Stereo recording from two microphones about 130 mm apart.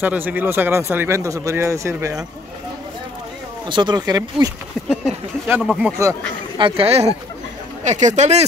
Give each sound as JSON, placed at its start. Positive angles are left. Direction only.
{"t": 0.0, "sound": "speech", "side_deg": -15}
{"t": 3.6, "sound": "speech", "side_deg": -35}
{"t": 4.8, "sound": "speech", "side_deg": -5}
{"t": 6.6, "sound": "speech", "side_deg": -50}
{"t": 7.8, "sound": "speech", "side_deg": -65}